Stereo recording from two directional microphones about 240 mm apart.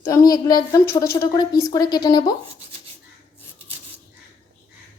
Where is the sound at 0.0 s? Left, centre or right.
Centre.